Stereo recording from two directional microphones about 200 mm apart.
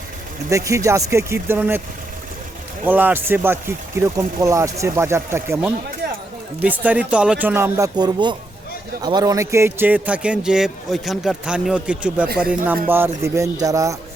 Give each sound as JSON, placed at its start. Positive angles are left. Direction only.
{"t": 0.5, "sound": "speech", "side_deg": -15}
{"t": 2.8, "sound": "speech", "side_deg": -10}
{"t": 6.8, "sound": "speech", "side_deg": -5}